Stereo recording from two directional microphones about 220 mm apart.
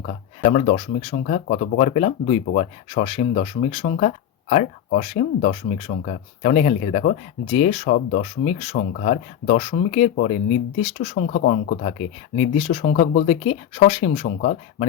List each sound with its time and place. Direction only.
0.0 s speech: 30° left (ahead or behind)